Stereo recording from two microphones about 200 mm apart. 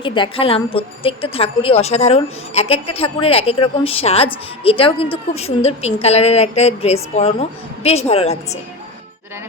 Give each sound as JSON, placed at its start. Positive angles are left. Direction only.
{"t": 0.0, "sound": "a woman's voice", "side_deg": 25}